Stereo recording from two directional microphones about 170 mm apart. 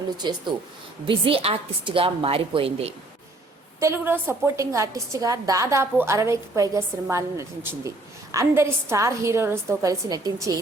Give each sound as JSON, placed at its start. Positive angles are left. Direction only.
{"t": 0.2, "sound": "a woman's voice", "side_deg": -25}
{"t": 3.8, "sound": "a woman's voice", "side_deg": -15}